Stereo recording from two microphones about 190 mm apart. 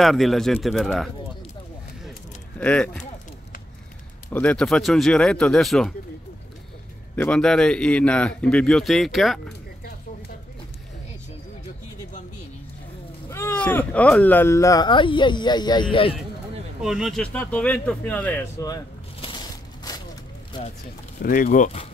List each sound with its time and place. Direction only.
0.0 s a man's voice: centre (ahead or behind)
2.6 s speech: 5° left (ahead or behind)
4.3 s a man's voice: 5° left (ahead or behind)
7.2 s a man's voice: 5° left (ahead or behind)
13.3 s speech: 10° left (ahead or behind); by 16.2 s 25° left (ahead or behind)
16.8 s speech: centre (ahead or behind); by 18.8 s 15° left (ahead or behind)
19.2 s crushing: 20° left (ahead or behind)
21.2 s speech: 50° left (ahead or behind)